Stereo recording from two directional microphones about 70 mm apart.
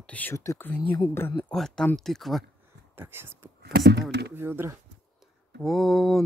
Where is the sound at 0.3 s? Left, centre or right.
Left.